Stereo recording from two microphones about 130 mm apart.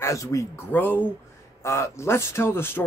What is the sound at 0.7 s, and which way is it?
Speech, 15° left (ahead or behind).